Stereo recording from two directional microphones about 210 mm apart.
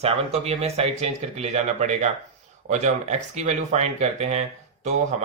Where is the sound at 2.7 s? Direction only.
35° right (ahead or behind).